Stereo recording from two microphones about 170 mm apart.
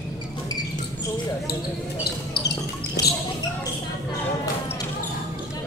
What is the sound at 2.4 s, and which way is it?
Music, 80° left.